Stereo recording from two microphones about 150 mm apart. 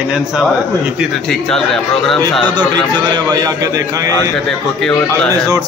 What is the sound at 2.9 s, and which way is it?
Speech, 30° right (ahead or behind).